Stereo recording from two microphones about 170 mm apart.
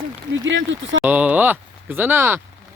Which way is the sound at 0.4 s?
90° right.